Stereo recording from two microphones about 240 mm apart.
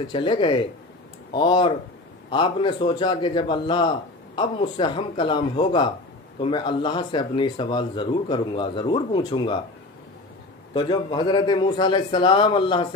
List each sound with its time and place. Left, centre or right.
0.0 s speech: left
10.7 s speech: centre